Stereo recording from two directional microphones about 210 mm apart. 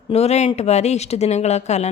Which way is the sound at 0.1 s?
30° left (ahead or behind).